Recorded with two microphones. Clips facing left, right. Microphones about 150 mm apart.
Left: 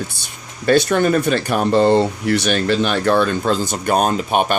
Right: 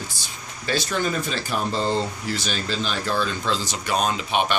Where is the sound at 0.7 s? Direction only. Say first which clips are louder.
Left 10 dB; 60° left (ahead or behind).